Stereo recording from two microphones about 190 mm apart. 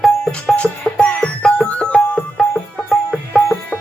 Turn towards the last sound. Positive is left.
turn(degrees=0)  # may be behind; listen again after turning